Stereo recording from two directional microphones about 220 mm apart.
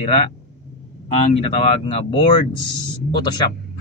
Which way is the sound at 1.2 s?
25° left (ahead or behind).